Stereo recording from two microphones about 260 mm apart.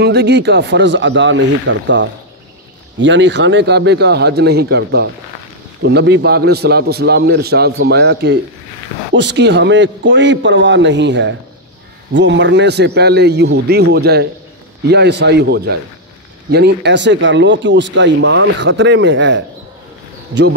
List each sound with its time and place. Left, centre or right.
0.0 s a man's voice: right